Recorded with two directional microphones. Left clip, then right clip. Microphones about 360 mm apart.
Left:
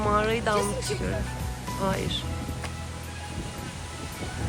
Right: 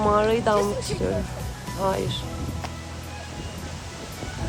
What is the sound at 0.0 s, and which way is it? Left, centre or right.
Speech, centre.